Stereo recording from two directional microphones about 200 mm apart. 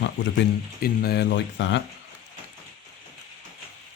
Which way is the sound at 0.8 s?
55° left (ahead or behind).